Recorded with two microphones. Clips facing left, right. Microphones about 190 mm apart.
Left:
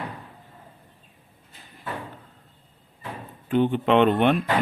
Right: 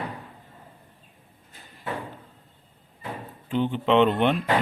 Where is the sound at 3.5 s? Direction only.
55° left (ahead or behind).